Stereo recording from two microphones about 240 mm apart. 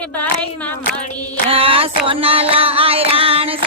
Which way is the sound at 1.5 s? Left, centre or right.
Right.